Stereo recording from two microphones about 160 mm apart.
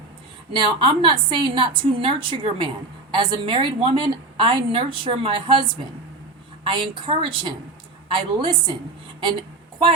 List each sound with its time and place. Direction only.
0.5 s a woman's voice: 30° right (ahead or behind)